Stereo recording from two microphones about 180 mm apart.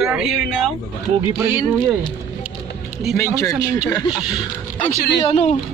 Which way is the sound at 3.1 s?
15° left (ahead or behind).